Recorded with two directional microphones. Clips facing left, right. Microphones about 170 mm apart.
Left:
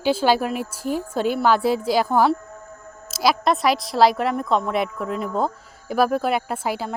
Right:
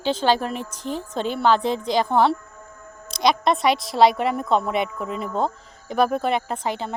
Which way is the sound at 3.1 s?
5° left (ahead or behind).